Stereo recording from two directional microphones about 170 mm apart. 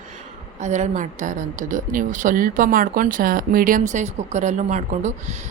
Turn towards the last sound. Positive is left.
turn(degrees=-45)  # may be behind; listen again after turning